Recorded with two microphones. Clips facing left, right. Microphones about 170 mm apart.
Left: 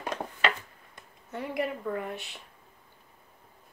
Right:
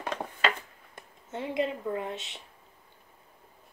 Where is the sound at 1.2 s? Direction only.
20° right (ahead or behind).